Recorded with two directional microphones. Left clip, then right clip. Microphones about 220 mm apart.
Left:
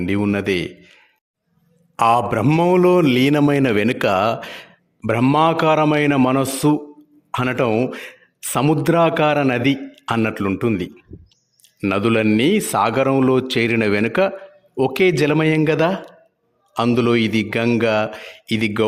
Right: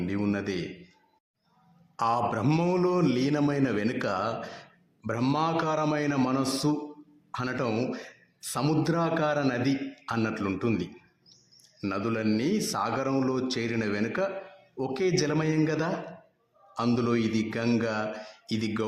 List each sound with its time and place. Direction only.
0.0 s a man's voice: 35° left (ahead or behind)
2.0 s a man's voice: 40° left (ahead or behind)